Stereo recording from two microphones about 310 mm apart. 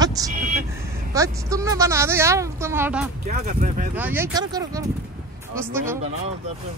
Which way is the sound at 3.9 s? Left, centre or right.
Centre.